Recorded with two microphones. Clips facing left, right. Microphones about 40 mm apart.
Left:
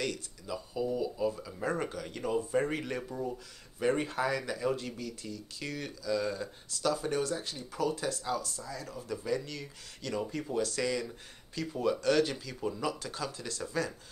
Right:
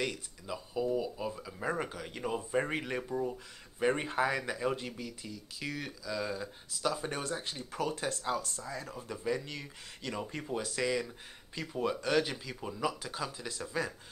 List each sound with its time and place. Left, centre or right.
0.0 s speech: centre